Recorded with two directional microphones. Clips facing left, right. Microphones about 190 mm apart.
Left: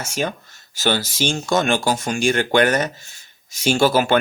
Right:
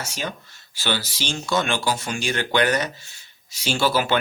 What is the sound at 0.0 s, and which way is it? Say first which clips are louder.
Speech: left 6 dB; 50° left (ahead or behind).